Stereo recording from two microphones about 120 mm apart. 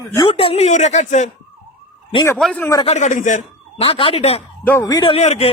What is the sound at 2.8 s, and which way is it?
Speech, 80° left.